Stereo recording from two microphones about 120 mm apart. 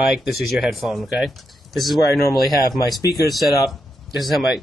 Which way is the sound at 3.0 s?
30° left (ahead or behind).